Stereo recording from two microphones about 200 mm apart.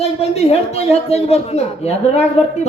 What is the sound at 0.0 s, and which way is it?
A man's voice, 30° left (ahead or behind).